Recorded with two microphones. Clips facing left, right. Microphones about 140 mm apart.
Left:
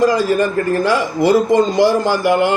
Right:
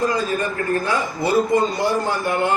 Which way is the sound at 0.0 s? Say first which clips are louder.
Left 7 dB; 90° left.